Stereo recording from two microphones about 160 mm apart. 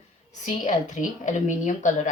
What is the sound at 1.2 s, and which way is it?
Speech, 50° left (ahead or behind).